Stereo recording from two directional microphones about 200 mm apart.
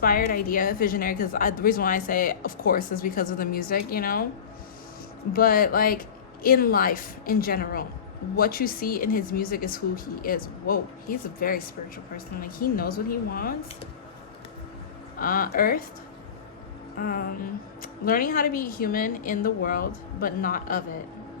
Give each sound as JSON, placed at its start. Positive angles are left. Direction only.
{"t": 0.0, "sound": "a woman's voice", "side_deg": 50}
{"t": 5.3, "sound": "a woman's voice", "side_deg": 45}
{"t": 15.2, "sound": "a woman's voice", "side_deg": 45}
{"t": 17.0, "sound": "a woman's voice", "side_deg": 45}